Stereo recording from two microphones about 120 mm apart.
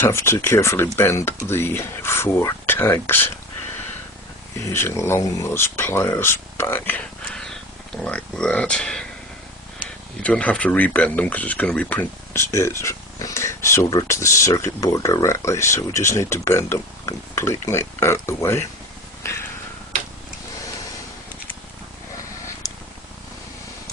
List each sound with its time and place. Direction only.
0.0 s speech: 20° left (ahead or behind)
4.5 s speech: 20° left (ahead or behind)
7.3 s cat: 5° left (ahead or behind)
8.0 s speech: 10° left (ahead or behind)
10.2 s speech: 10° left (ahead or behind)
19.2 s a sound: 20° left (ahead or behind)